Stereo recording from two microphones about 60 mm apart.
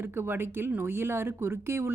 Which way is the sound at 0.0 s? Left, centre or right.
Right.